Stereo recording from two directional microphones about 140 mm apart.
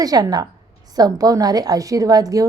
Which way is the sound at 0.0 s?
25° right (ahead or behind).